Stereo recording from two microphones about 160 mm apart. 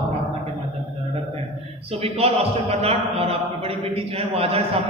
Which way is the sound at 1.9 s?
40° right (ahead or behind).